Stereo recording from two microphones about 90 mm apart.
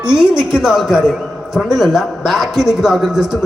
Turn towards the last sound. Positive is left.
turn(degrees=-5)  # may be behind; listen again after turning